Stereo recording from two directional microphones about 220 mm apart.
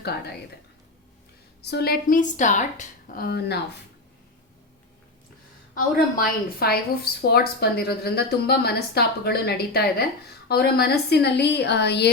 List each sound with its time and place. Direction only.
0.0 s a woman's voice: 50° left (ahead or behind)
1.6 s a woman's voice: 45° left (ahead or behind)
5.7 s a woman's voice: 40° left (ahead or behind)